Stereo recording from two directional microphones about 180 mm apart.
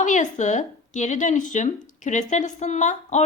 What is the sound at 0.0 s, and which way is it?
Speech, 40° left (ahead or behind).